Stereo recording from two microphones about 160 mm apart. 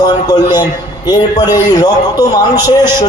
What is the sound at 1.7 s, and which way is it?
Music, 25° left (ahead or behind).